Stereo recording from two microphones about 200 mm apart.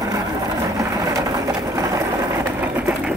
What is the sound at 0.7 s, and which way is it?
Vehicle, 15° right (ahead or behind).